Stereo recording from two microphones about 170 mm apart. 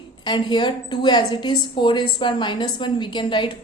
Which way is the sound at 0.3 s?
25° left (ahead or behind).